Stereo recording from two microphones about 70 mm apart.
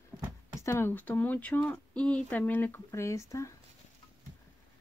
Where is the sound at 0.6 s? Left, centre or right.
Left.